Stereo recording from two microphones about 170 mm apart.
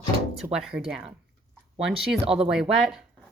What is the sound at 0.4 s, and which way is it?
A woman's voice, 5° right (ahead or behind).